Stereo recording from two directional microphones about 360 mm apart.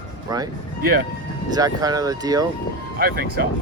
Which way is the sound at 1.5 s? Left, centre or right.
Centre.